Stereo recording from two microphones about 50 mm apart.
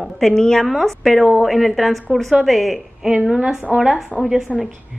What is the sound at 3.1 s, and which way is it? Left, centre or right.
Speech, centre.